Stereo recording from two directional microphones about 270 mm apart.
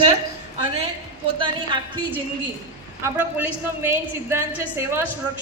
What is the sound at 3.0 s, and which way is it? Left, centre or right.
A woman's voice, centre.